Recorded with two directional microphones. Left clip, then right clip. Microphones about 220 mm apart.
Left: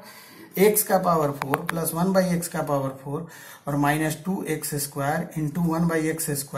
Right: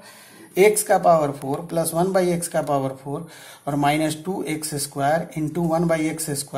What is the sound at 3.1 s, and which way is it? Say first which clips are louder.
Speech: right 2 dB; 25° right (ahead or behind).